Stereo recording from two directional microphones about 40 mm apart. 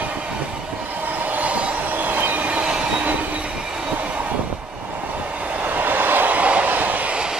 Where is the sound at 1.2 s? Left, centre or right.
Right.